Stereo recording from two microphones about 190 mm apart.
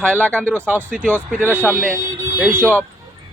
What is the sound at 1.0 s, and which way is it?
Speech, 10° right (ahead or behind).